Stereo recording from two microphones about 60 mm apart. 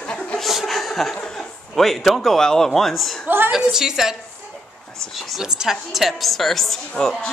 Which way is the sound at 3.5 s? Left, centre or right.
Centre.